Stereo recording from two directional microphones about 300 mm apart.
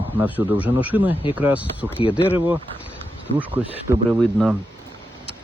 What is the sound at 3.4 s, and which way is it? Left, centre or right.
A man's voice, centre.